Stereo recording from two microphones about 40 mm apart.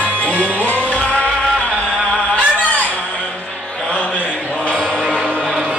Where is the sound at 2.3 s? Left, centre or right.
Left.